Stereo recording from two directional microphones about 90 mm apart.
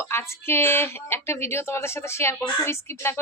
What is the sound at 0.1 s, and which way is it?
Speech, 25° left (ahead or behind).